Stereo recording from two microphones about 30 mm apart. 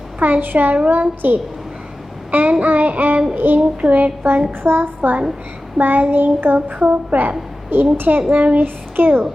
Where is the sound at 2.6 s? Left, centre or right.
Right.